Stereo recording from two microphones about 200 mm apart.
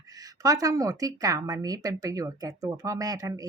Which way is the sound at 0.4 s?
15° right (ahead or behind).